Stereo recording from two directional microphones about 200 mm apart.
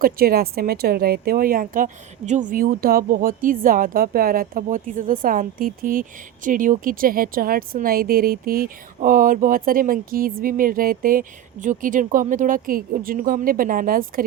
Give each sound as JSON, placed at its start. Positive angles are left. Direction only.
{"t": 0.0, "sound": "speech", "side_deg": -50}